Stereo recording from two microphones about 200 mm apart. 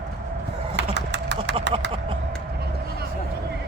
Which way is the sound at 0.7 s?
60° right (ahead or behind).